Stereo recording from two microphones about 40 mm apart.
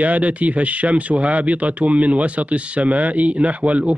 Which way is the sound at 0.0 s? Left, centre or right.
Right.